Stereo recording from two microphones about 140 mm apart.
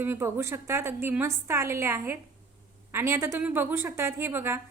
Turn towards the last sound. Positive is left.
turn(degrees=-15)  # may be behind; listen again after turning